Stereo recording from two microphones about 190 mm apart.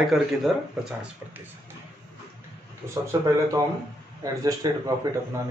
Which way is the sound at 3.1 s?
15° right (ahead or behind).